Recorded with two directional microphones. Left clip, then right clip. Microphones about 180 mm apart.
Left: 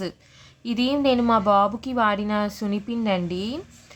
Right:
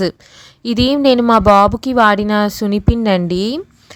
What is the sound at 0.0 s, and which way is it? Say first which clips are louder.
A woman's voice: right 13 dB; 45° right (ahead or behind).